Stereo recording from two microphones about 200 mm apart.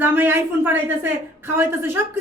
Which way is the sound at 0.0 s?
10° right (ahead or behind).